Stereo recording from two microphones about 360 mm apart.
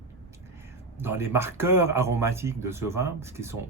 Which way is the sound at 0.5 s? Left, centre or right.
Centre.